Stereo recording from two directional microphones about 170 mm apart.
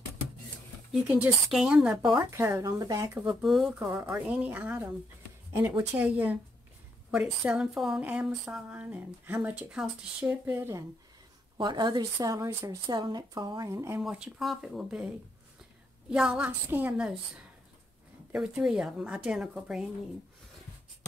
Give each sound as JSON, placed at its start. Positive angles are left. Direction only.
{"t": 0.9, "sound": "a woman's voice", "side_deg": -10}
{"t": 3.3, "sound": "speech", "side_deg": 0}
{"t": 11.5, "sound": "speech", "side_deg": -25}
{"t": 14.0, "sound": "a woman's voice", "side_deg": -5}
{"t": 16.1, "sound": "speech", "side_deg": -5}
{"t": 18.3, "sound": "a woman's voice", "side_deg": -5}